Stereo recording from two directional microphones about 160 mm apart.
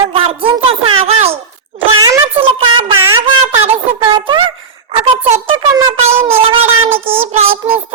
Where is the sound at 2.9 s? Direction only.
15° right (ahead or behind).